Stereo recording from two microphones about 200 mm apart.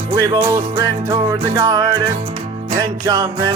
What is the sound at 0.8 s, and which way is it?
Music, 15° right (ahead or behind).